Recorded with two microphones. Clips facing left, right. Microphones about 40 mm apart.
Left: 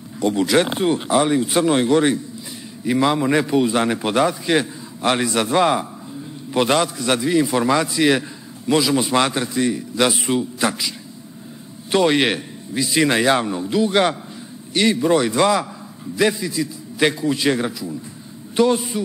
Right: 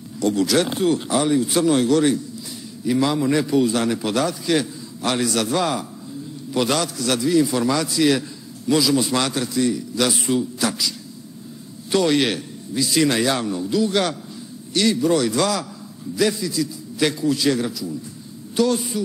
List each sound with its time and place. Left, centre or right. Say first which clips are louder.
0.2 s a man's voice: left 2 dB; left
11.9 s a man's voice: left 2 dB; left